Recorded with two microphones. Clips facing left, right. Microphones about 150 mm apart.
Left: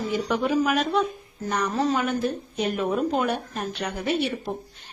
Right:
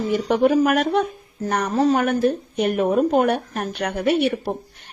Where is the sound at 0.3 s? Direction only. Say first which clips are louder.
Right 7 dB; 60° right (ahead or behind).